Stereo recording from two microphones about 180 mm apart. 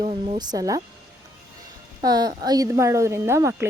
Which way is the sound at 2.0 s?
20° right (ahead or behind).